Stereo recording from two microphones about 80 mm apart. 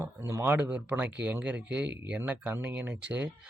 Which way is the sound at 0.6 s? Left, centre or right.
Centre.